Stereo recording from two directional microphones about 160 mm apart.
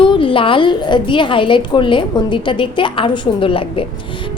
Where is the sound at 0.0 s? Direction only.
30° left (ahead or behind).